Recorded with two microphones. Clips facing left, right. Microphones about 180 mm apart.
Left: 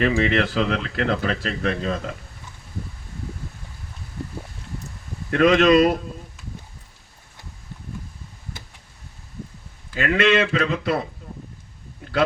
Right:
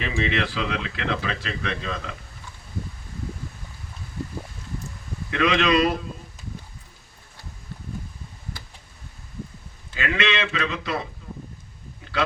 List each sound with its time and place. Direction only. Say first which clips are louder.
0.0 s speech: left 6 dB; 50° left (ahead or behind)
5.3 s speech: left 6 dB; 45° left (ahead or behind)
9.9 s speech: left 7 dB; 50° left (ahead or behind)